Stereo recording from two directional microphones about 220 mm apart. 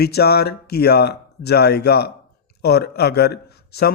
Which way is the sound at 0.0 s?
45° left (ahead or behind).